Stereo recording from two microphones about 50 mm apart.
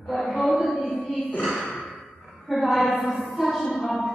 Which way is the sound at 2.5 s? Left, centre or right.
Centre.